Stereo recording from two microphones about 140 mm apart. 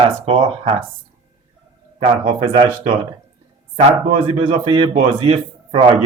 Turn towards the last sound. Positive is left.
turn(degrees=-45)  # may be behind; listen again after turning